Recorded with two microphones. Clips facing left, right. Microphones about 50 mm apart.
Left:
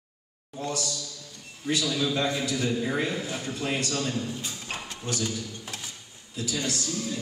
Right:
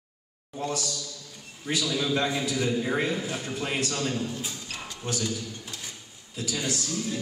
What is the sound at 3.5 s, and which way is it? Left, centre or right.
A man's voice, right.